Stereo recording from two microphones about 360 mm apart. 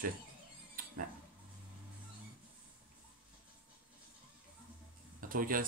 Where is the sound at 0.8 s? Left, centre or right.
Right.